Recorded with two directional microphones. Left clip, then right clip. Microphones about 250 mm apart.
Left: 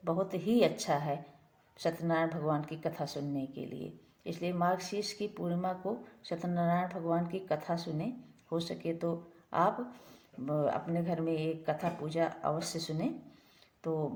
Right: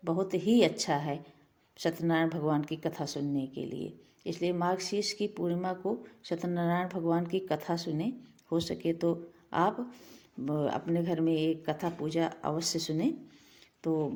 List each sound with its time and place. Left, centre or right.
0.0 s speech: right